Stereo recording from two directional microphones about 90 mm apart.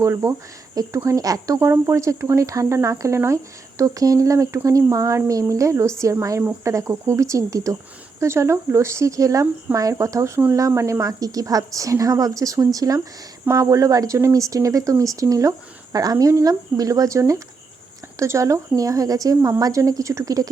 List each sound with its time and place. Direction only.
0.0 s speech: 35° right (ahead or behind)